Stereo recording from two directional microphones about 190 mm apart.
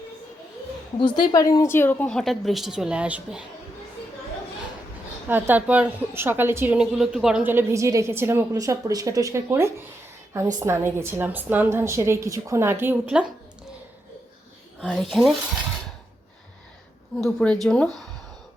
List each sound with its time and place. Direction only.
0.9 s a woman's voice: 25° left (ahead or behind); by 3.4 s 5° right (ahead or behind)
5.3 s a woman's voice: 10° right (ahead or behind)
14.8 s a woman's voice: centre (ahead or behind)
17.2 s a woman's voice: 5° left (ahead or behind)